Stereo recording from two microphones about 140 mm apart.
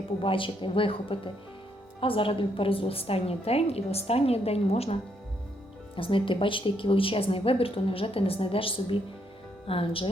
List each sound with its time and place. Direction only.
0.2 s a woman's voice: 40° left (ahead or behind)
6.0 s a woman's voice: 40° left (ahead or behind)